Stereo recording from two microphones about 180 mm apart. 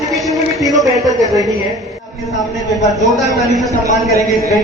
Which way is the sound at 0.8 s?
20° right (ahead or behind).